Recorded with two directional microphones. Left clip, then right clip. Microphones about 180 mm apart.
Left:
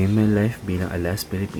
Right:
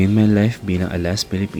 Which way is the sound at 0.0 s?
40° right (ahead or behind).